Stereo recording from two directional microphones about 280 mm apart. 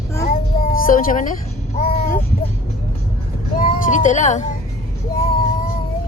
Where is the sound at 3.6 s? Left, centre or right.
Left.